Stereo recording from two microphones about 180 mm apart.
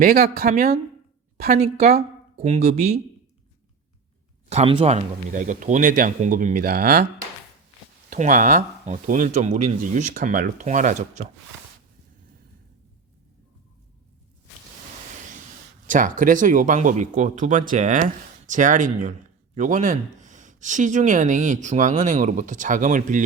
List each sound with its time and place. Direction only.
0.0 s speech: 60° right (ahead or behind)
1.5 s speech: 35° right (ahead or behind)
4.4 s speech: 35° right (ahead or behind); by 7.0 s 60° right (ahead or behind)
8.1 s speech: 45° right (ahead or behind)
15.9 s speech: 45° right (ahead or behind)